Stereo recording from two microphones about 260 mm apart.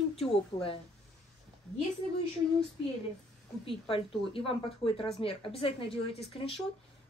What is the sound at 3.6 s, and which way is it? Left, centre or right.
Speech, left.